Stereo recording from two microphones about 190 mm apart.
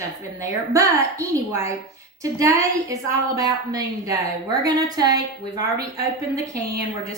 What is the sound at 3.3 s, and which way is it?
A woman's voice, 15° right (ahead or behind).